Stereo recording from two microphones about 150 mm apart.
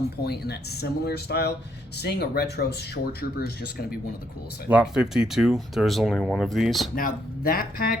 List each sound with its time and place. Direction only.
0.3 s speech: 90° left
4.7 s speech: 5° right (ahead or behind)
6.9 s speech: 70° left (ahead or behind)